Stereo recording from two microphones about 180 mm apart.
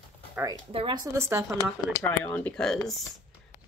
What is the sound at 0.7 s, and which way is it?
Speech, 25° right (ahead or behind).